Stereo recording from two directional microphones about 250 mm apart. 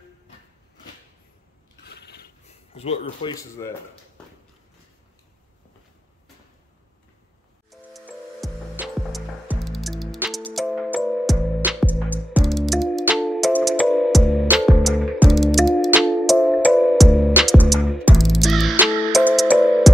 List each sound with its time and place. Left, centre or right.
1.9 s mechanisms: left
2.4 s speech: left
7.7 s music: centre